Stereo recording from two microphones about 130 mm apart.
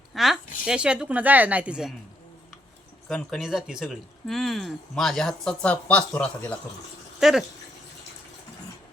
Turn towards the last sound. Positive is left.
turn(degrees=-5)  # may be behind; listen again after turning